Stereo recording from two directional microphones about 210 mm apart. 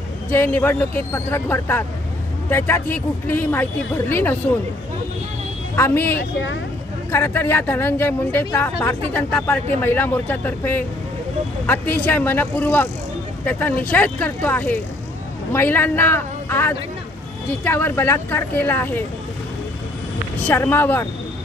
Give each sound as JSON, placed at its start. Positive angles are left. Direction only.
{"t": 0.3, "sound": "speech", "side_deg": 10}
{"t": 5.8, "sound": "speech", "side_deg": 10}
{"t": 6.1, "sound": "speech", "side_deg": 60}
{"t": 7.1, "sound": "speech", "side_deg": 10}
{"t": 20.3, "sound": "speech", "side_deg": 10}